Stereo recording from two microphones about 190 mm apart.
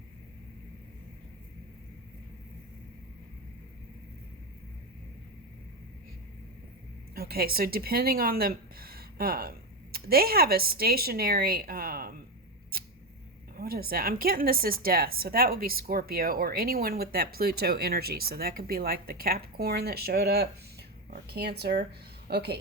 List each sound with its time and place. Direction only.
7.2 s speech: 55° right (ahead or behind)
13.6 s a woman's voice: 50° right (ahead or behind)